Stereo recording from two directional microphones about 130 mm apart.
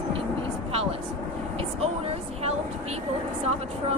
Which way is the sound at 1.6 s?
50° right (ahead or behind).